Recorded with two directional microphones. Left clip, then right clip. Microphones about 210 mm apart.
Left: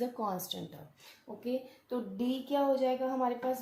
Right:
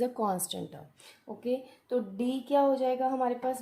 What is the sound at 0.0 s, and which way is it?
Speech, 50° right (ahead or behind).